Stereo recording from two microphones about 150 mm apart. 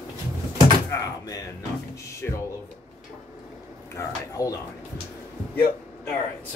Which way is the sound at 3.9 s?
20° left (ahead or behind).